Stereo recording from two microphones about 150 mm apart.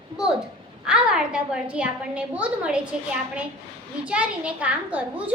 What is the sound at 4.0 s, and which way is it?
A woman's voice, 5° right (ahead or behind).